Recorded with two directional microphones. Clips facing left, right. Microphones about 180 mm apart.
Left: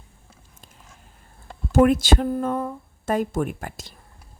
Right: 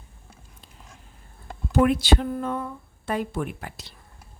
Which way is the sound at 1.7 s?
45° left (ahead or behind).